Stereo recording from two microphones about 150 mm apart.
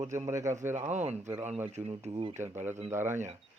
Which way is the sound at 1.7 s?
45° right (ahead or behind).